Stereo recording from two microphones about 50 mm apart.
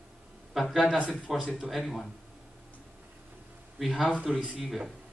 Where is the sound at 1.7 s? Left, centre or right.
Centre.